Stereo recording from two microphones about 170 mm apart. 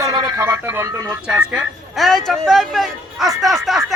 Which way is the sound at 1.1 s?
5° right (ahead or behind).